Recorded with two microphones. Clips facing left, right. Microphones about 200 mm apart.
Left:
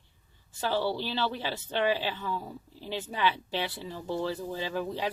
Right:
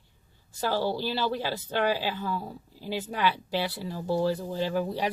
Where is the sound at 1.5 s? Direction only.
40° right (ahead or behind).